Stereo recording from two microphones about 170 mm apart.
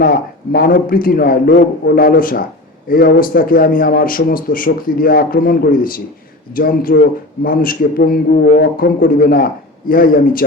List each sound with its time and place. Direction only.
0.0 s speech: 55° left (ahead or behind)